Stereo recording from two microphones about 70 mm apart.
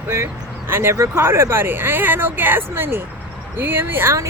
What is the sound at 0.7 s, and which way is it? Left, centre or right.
Speech, right.